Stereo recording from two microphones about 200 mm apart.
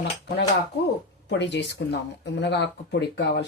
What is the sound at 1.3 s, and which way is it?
Speech, 60° left (ahead or behind).